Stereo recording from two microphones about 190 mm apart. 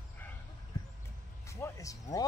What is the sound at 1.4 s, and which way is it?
Music, 15° left (ahead or behind).